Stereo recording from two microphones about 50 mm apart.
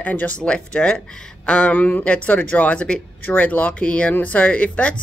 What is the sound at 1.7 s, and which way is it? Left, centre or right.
Speech, left.